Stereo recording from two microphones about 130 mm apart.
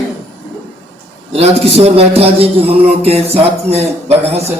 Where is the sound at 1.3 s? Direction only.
50° right (ahead or behind).